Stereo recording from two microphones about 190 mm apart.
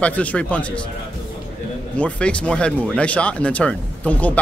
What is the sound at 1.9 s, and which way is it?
Speech, 5° left (ahead or behind).